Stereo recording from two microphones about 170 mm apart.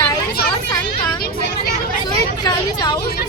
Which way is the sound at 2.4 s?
25° left (ahead or behind).